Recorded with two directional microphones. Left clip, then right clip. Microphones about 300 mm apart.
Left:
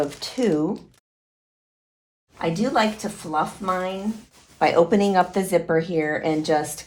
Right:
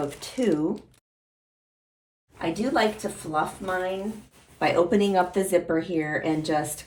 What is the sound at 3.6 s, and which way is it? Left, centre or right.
Speech, centre.